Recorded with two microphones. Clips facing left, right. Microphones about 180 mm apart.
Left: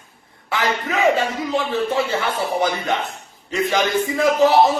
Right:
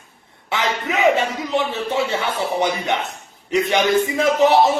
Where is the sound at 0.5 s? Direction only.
20° right (ahead or behind).